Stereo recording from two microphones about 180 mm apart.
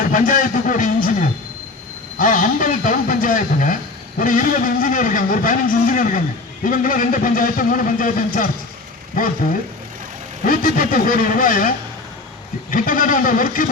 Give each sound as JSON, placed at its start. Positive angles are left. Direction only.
{"t": 0.1, "sound": "a man's voice", "side_deg": 50}
{"t": 12.7, "sound": "speech", "side_deg": 50}